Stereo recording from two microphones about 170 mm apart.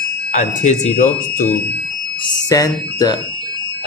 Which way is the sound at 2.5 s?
20° left (ahead or behind).